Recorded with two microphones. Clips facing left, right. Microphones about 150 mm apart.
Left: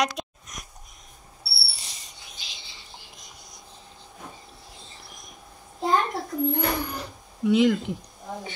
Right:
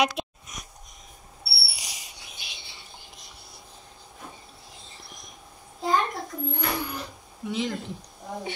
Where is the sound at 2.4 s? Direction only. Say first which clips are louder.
Right 1 dB; 60° right (ahead or behind).